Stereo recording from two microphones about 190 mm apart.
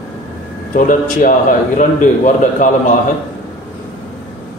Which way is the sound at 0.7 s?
45° left (ahead or behind).